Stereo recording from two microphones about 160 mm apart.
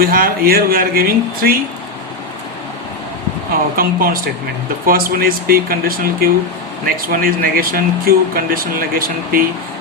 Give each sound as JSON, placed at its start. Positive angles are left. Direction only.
{"t": 0.0, "sound": "speech", "side_deg": -65}
{"t": 3.8, "sound": "speech", "side_deg": -65}